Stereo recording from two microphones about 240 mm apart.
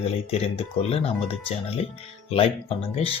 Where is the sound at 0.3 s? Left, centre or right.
Left.